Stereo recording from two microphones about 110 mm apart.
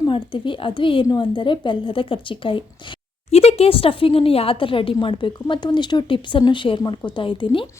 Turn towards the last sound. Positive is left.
turn(degrees=50)  # may be behind; listen again after turning